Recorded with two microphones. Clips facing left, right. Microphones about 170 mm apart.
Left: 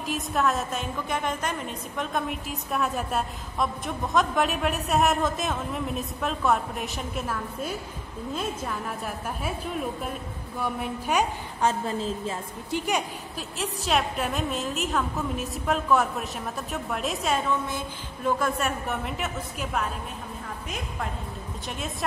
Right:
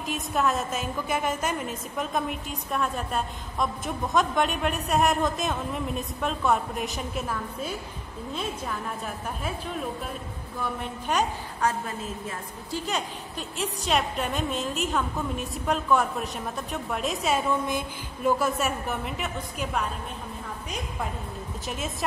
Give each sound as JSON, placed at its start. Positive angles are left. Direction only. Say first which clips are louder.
{"t": 0.0, "sound": "a woman's voice", "louder": "left 1 dB", "side_deg": 0}
{"t": 11.6, "sound": "a woman's voice", "louder": "left 3 dB", "side_deg": 25}
{"t": 13.6, "sound": "a woman's voice", "louder": "even", "side_deg": 0}
{"t": 17.6, "sound": "a woman's voice", "louder": "right 3 dB", "side_deg": -10}
{"t": 21.6, "sound": "a woman's voice", "louder": "right 1 dB", "side_deg": 0}